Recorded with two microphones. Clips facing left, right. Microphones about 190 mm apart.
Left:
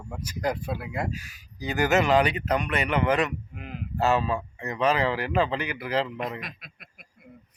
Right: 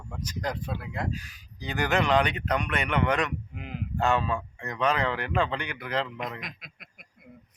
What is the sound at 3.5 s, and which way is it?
Speech, 15° right (ahead or behind).